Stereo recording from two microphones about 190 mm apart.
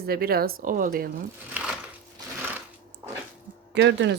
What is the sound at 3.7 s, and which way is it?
Speech, 65° right (ahead or behind).